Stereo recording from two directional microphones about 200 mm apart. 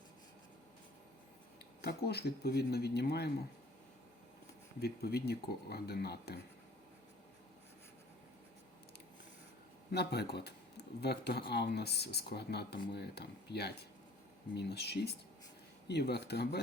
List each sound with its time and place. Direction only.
1.8 s speech: 55° left (ahead or behind)
4.8 s speech: 55° left (ahead or behind)
9.9 s speech: 55° left (ahead or behind)